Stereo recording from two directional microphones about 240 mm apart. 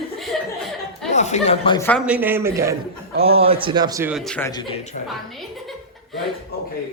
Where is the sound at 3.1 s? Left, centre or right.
Right; by 4.5 s centre.